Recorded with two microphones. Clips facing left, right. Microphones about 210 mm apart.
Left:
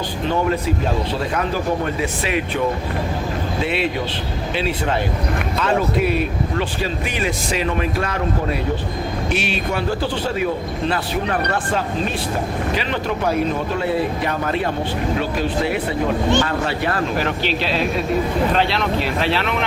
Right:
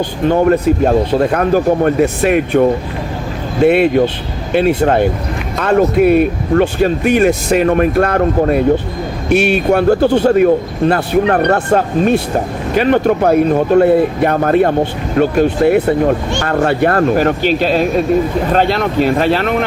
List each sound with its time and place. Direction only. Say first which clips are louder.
0.3 s speech: right 9 dB; 50° right (ahead or behind)